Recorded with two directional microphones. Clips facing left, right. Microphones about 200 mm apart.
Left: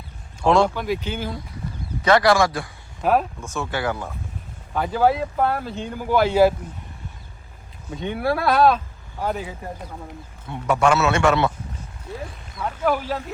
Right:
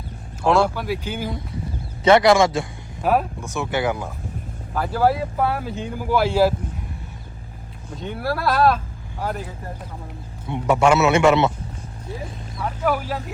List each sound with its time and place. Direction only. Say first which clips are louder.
0.4 s speech: left 1 dB; 5° right (ahead or behind)
2.0 s speech: right 3 dB; 20° right (ahead or behind)
3.0 s speech: even; 5° right (ahead or behind)
3.4 s speech: right 3 dB; 15° right (ahead or behind)
4.7 s speech: even; 5° right (ahead or behind)
7.9 s speech: left 3 dB; centre (ahead or behind)
10.5 s speech: right 2 dB; 20° right (ahead or behind)
12.5 s speech: even; 5° right (ahead or behind)